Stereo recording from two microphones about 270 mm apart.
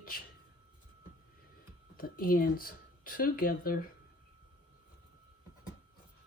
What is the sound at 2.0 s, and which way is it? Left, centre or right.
Speech, left.